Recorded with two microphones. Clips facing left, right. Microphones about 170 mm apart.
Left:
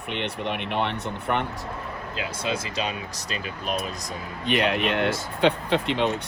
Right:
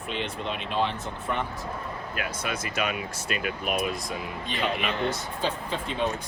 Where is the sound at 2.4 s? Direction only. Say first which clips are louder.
Left 2 dB; 25° left (ahead or behind).